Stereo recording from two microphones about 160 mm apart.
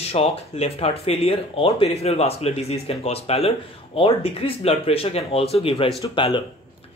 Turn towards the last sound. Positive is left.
turn(degrees=35)  # may be behind; listen again after turning